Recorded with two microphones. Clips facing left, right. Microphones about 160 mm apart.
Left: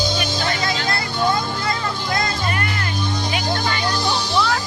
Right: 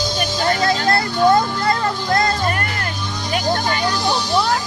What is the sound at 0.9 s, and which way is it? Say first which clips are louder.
Vehicle: right 7 dB; 55° right (ahead or behind).